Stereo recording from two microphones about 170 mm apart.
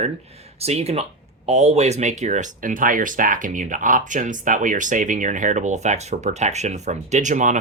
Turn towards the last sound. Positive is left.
turn(degrees=-45)  # may be behind; listen again after turning